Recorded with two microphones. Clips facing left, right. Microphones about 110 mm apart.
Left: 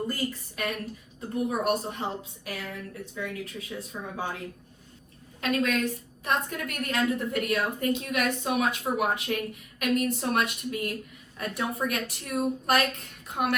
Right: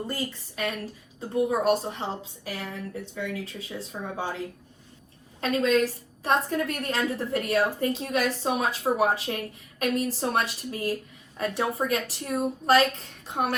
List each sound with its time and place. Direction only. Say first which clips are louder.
0.1 s a woman's voice: left 1 dB; 30° right (ahead or behind)